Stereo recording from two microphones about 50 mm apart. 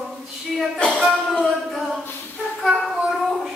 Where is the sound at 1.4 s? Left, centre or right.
Centre.